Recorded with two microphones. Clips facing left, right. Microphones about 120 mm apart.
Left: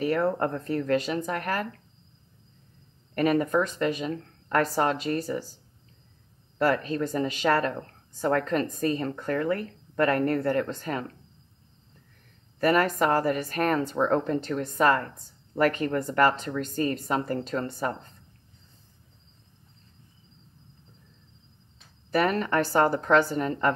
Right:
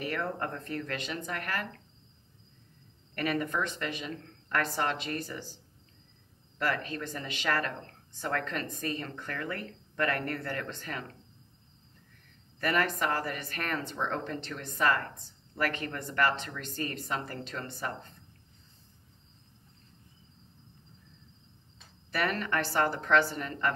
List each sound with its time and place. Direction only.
0.0 s a woman's voice: 35° left (ahead or behind)
3.2 s a woman's voice: 35° left (ahead or behind)
6.6 s a woman's voice: 35° left (ahead or behind)
12.5 s a woman's voice: 40° left (ahead or behind)
22.1 s a woman's voice: 40° left (ahead or behind)